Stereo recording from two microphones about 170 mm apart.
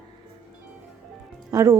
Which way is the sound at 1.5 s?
20° right (ahead or behind).